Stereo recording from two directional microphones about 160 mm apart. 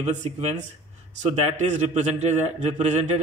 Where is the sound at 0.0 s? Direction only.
45° right (ahead or behind).